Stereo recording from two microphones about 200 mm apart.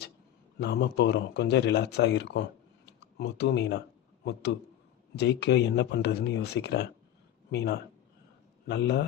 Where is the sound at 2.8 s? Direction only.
60° left (ahead or behind).